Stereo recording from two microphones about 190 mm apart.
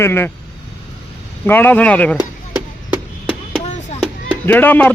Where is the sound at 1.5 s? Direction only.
10° left (ahead or behind).